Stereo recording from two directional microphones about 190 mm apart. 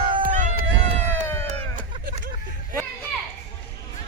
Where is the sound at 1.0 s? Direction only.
10° left (ahead or behind).